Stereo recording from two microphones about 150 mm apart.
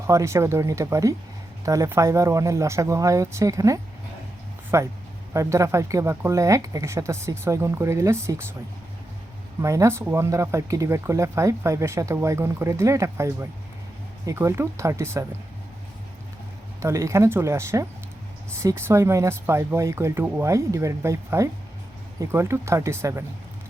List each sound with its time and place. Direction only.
0.1 s speech: 20° right (ahead or behind)
9.6 s speech: 20° right (ahead or behind)
16.8 s speech: 20° right (ahead or behind)